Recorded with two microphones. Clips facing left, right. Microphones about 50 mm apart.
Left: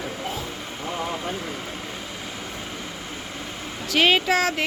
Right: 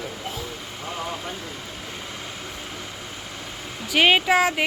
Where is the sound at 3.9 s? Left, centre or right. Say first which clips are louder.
Right 2 dB; centre.